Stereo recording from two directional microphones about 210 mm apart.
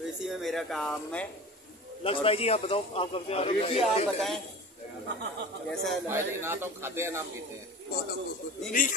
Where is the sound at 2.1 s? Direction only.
30° left (ahead or behind).